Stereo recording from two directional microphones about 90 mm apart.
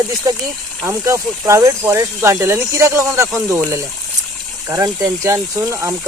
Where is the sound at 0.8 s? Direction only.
35° right (ahead or behind).